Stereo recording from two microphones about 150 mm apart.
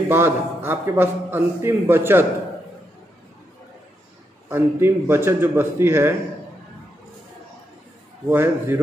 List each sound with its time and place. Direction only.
0.1 s a man's voice: 15° right (ahead or behind)
4.5 s a man's voice: 15° right (ahead or behind)
8.3 s a man's voice: 15° right (ahead or behind)